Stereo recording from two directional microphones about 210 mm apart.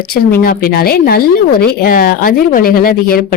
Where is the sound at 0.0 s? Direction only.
45° left (ahead or behind).